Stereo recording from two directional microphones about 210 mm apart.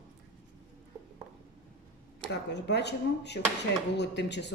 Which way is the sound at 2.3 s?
55° left (ahead or behind).